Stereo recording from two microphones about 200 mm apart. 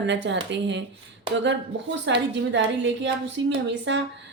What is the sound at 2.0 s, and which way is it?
A woman's voice, 65° right (ahead or behind).